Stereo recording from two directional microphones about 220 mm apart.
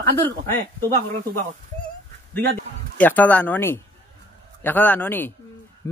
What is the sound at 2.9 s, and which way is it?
Speech, 5° left (ahead or behind).